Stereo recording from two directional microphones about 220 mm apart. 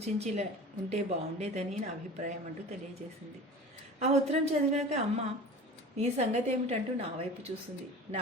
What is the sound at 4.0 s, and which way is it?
A woman's voice, 30° right (ahead or behind).